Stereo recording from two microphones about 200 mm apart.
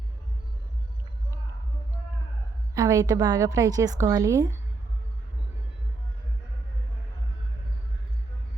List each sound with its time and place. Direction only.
2.7 s a woman's voice: 15° right (ahead or behind)